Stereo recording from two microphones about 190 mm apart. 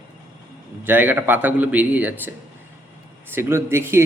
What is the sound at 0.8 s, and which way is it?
Speech, 10° right (ahead or behind).